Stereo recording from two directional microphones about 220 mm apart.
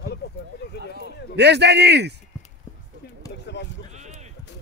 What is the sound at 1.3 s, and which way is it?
Speech, 50° right (ahead or behind).